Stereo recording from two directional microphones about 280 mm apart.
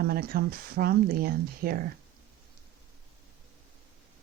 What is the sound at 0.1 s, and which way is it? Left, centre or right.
Speech, right.